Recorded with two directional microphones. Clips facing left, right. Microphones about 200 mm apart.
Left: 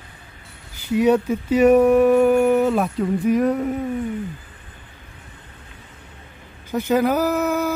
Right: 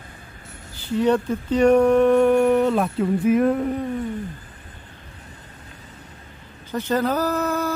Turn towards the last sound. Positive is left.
turn(degrees=10)  # may be behind; listen again after turning